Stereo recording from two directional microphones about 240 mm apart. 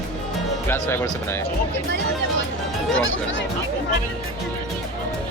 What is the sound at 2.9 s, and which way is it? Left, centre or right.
Speech, left.